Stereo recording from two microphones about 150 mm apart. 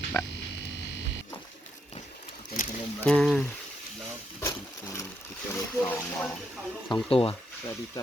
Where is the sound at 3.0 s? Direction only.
5° left (ahead or behind).